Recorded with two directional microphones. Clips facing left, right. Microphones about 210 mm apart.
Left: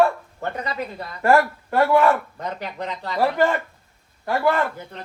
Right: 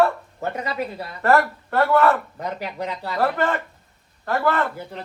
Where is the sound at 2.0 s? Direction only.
5° right (ahead or behind).